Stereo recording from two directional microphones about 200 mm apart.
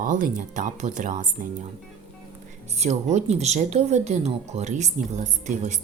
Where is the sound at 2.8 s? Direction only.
35° right (ahead or behind).